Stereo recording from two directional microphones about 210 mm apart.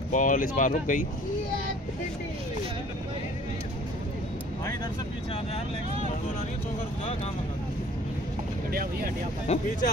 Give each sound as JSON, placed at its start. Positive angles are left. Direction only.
{"t": 0.1, "sound": "speech", "side_deg": 40}
{"t": 9.5, "sound": "speech", "side_deg": 30}